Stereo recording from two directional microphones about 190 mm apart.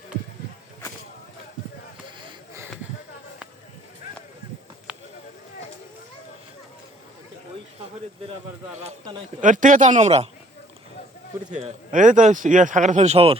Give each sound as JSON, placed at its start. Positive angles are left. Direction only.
{"t": 9.4, "sound": "speech", "side_deg": -45}
{"t": 11.5, "sound": "speech", "side_deg": -40}